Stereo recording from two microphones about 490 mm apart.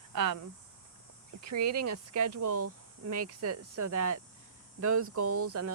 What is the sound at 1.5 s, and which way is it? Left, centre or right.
Speech, right.